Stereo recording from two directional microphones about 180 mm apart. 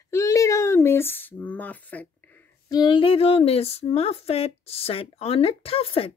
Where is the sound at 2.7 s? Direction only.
25° left (ahead or behind).